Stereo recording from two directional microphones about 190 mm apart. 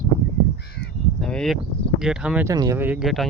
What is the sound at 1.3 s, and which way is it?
Speech, centre (ahead or behind).